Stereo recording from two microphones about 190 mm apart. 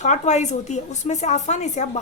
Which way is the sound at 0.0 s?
40° left (ahead or behind).